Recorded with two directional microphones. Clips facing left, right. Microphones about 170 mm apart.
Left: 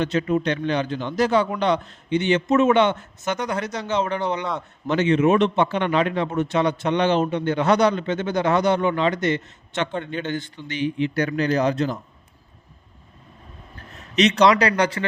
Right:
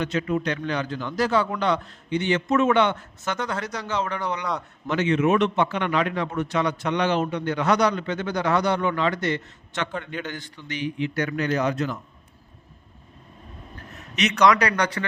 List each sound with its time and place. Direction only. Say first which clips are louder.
0.0 s a man's voice: left 3 dB; 30° left (ahead or behind)
14.2 s a man's voice: left 3 dB; 30° left (ahead or behind)